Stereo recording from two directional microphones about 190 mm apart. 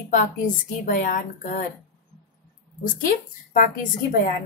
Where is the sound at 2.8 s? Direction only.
45° left (ahead or behind).